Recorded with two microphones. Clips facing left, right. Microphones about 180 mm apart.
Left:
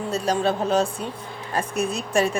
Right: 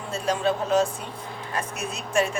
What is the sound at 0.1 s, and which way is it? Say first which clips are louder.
Speech: left 1 dB; 35° left (ahead or behind).